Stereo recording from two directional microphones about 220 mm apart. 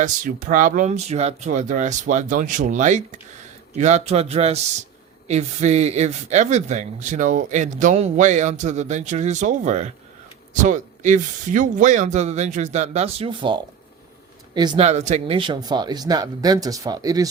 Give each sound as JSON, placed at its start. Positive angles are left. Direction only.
{"t": 0.0, "sound": "speech", "side_deg": -40}
{"t": 14.8, "sound": "speech", "side_deg": -30}